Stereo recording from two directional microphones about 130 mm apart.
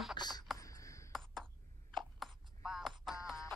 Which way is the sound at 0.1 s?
35° left (ahead or behind).